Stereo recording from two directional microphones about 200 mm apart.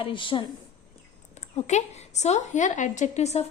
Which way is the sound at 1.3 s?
35° left (ahead or behind).